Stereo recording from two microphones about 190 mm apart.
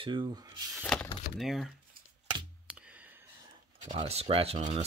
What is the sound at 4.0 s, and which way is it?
Speech, 30° right (ahead or behind).